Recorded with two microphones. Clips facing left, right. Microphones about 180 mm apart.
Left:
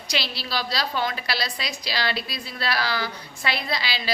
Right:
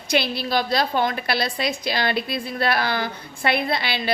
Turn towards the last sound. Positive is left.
turn(degrees=-55)  # may be behind; listen again after turning